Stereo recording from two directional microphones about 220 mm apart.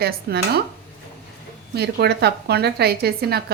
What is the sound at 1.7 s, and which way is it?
A woman's voice, 50° right (ahead or behind).